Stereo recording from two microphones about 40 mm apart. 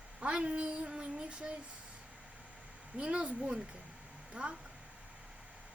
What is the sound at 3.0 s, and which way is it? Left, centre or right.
Speech, right.